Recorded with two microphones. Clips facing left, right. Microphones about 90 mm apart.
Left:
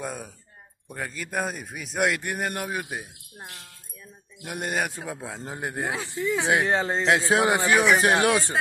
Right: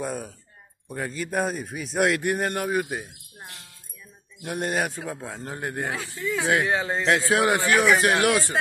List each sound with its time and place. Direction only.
0.0 s a man's voice: centre (ahead or behind)
5.4 s speech: 20° left (ahead or behind)